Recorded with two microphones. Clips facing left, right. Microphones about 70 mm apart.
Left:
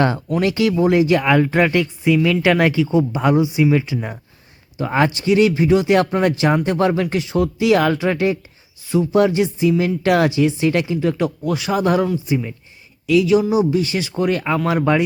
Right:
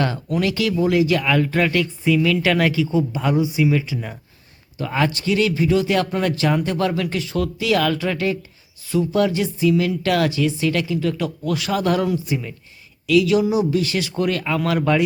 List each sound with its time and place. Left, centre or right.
0.0 s speech: left
11.5 s speech: centre